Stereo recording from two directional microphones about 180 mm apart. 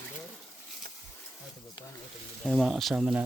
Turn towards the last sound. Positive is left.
turn(degrees=-5)  # may be behind; listen again after turning